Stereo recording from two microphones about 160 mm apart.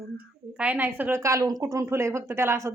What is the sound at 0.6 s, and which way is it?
A woman's voice, 10° right (ahead or behind).